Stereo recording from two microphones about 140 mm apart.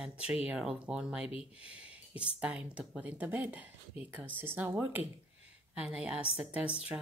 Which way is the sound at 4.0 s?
45° left (ahead or behind).